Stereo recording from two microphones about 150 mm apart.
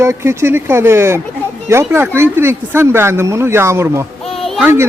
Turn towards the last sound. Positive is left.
turn(degrees=-15)  # may be behind; listen again after turning